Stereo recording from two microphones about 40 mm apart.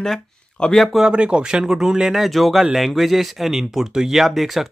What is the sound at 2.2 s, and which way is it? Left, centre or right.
Speech, centre.